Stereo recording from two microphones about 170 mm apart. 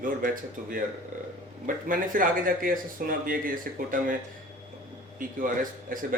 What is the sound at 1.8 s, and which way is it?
Speech, 55° right (ahead or behind).